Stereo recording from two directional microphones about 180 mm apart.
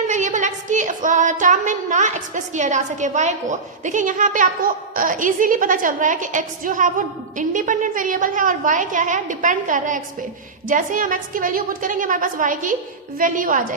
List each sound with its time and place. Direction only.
0.1 s speech: 45° right (ahead or behind)